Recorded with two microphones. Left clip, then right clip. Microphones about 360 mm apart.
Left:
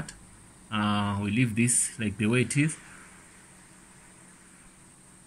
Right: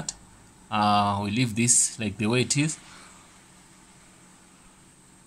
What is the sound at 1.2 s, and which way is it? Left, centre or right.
Speech, centre.